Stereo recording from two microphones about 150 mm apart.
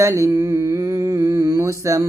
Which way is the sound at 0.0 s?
20° right (ahead or behind).